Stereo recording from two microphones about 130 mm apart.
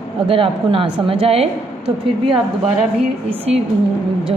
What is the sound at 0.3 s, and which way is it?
A woman's voice, 45° right (ahead or behind).